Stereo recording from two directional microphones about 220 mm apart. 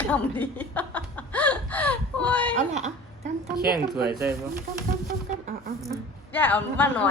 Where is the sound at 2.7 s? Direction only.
30° right (ahead or behind).